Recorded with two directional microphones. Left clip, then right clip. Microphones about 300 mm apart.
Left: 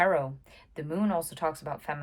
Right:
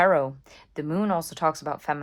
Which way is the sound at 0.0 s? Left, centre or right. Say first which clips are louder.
Right 5 dB; right.